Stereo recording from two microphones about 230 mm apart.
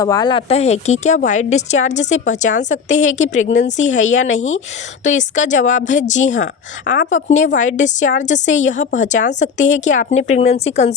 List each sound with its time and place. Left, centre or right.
0.0 s a woman's voice: centre